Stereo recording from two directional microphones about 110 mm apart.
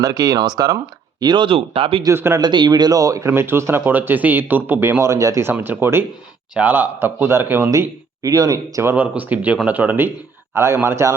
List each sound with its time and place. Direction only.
0.0 s speech: 35° right (ahead or behind)
1.2 s speech: 45° right (ahead or behind)
2.1 s speech: 20° right (ahead or behind)
2.4 s speech: 40° right (ahead or behind); by 7.7 s 20° right (ahead or behind)
7.7 s speech: 30° right (ahead or behind)